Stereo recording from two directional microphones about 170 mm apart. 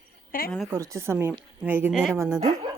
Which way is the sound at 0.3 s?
60° left (ahead or behind).